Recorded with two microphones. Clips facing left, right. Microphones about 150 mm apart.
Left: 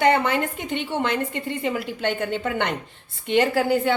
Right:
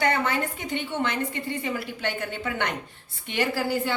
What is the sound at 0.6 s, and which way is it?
A woman's voice, 55° left (ahead or behind).